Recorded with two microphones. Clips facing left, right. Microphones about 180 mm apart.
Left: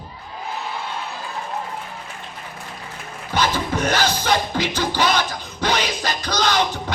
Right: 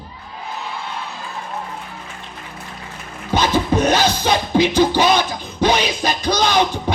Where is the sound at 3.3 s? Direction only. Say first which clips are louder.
Right 5 dB; 15° right (ahead or behind).